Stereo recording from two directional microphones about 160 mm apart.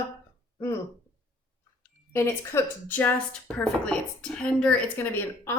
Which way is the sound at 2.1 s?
15° left (ahead or behind).